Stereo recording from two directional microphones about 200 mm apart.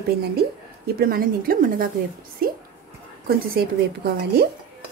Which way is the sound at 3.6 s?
50° right (ahead or behind).